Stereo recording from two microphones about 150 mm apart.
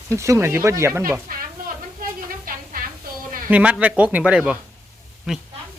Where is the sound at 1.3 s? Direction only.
70° right (ahead or behind).